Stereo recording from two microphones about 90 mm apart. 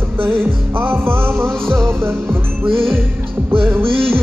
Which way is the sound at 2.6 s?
90° right.